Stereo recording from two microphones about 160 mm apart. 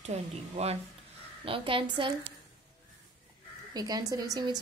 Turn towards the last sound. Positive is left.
turn(degrees=-25)  # may be behind; listen again after turning